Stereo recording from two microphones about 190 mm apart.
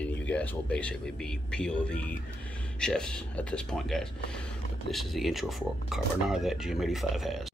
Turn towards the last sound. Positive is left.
turn(degrees=0)  # may be behind; listen again after turning